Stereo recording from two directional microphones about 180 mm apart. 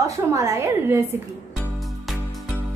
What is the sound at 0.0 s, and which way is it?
Speech, 15° right (ahead or behind).